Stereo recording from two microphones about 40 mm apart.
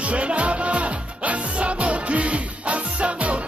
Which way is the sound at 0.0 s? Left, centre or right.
Right.